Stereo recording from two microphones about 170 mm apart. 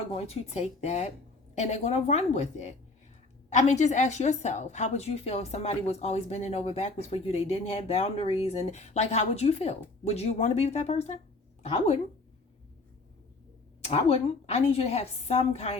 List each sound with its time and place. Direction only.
0.1 s a woman's voice: 35° left (ahead or behind)
13.8 s a woman's voice: 35° left (ahead or behind)